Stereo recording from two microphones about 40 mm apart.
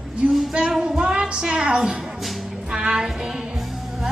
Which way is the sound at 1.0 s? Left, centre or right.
Right.